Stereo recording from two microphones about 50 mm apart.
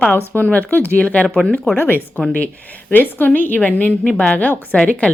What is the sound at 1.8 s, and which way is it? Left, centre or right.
Speech, left.